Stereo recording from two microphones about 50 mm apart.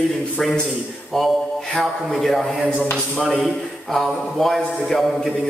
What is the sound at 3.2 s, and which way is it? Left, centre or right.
A man's voice, centre.